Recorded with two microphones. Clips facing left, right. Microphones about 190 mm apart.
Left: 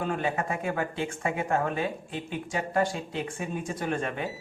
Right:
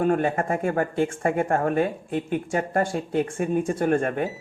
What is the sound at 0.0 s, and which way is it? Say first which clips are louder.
Speech: right 7 dB; 50° right (ahead or behind).